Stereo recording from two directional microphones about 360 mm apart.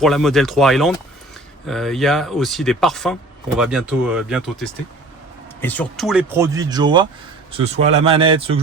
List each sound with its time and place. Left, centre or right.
0.0 s speech: centre